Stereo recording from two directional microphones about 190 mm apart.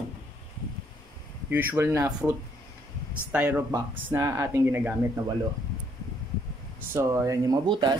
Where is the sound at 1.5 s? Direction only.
10° right (ahead or behind).